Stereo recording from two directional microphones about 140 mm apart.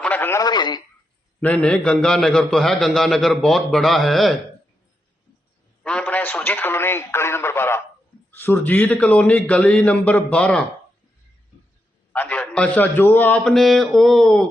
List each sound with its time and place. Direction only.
0.0 s radio: 15° left (ahead or behind); by 0.8 s 30° left (ahead or behind)
1.4 s a man's voice: 5° left (ahead or behind)
5.8 s a man's voice: 10° left (ahead or behind)
12.1 s a man's voice: 10° left (ahead or behind)